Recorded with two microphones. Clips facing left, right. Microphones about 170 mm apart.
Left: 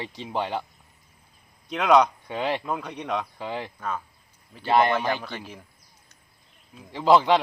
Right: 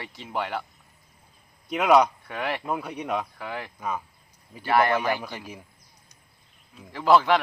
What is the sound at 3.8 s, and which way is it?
Speech, 10° right (ahead or behind).